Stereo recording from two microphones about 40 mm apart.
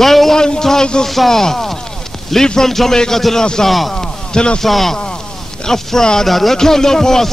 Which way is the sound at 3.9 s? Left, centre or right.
Left.